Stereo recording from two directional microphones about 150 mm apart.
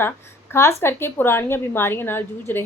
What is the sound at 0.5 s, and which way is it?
A woman's voice, 15° left (ahead or behind).